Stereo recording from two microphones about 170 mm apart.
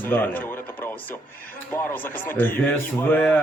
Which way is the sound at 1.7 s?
15° left (ahead or behind).